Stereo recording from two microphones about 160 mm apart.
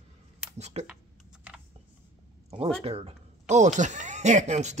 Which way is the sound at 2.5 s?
35° right (ahead or behind).